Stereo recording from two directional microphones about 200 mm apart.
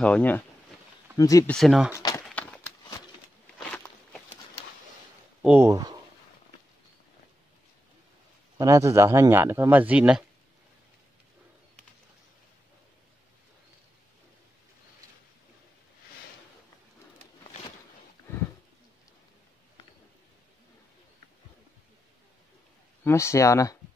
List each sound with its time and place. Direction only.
0.0 s speech: 5° left (ahead or behind)
1.5 s speech: centre (ahead or behind)
2.0 s a sound: 15° left (ahead or behind)
3.5 s walk: 5° left (ahead or behind)
5.4 s speech: 10° right (ahead or behind)
8.5 s speech: 15° right (ahead or behind)
23.0 s speech: 15° left (ahead or behind)